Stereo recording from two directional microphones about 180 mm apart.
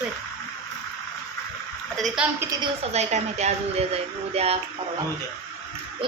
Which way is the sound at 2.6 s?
35° right (ahead or behind).